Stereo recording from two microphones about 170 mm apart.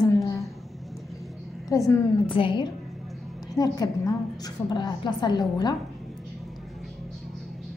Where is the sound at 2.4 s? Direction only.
30° left (ahead or behind).